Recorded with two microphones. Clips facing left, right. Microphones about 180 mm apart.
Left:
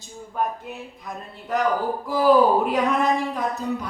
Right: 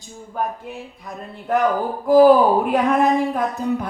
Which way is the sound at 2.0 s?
55° right (ahead or behind).